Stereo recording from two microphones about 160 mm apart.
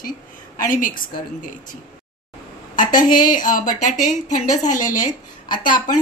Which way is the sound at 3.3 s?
55° left (ahead or behind).